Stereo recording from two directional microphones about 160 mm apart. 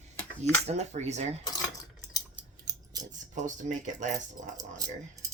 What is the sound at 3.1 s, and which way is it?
Speech, 50° right (ahead or behind).